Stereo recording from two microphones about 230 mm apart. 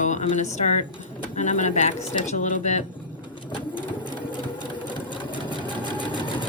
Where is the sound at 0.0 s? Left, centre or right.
Left.